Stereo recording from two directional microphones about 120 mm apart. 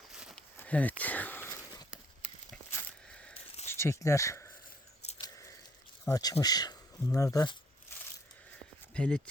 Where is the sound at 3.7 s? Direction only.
25° left (ahead or behind).